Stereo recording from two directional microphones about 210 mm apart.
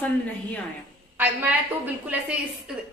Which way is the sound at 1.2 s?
10° right (ahead or behind).